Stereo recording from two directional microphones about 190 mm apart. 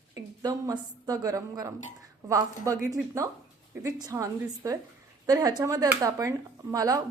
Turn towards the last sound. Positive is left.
turn(degrees=-20)  # may be behind; listen again after turning